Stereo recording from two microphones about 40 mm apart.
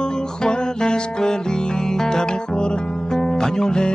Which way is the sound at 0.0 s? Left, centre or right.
Centre.